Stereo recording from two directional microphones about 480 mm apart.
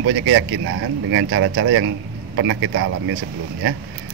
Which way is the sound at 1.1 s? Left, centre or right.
Right.